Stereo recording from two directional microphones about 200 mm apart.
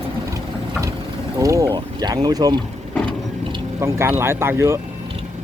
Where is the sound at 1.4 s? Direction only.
15° right (ahead or behind).